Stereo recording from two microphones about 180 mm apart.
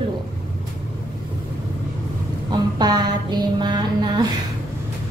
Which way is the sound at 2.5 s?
25° right (ahead or behind).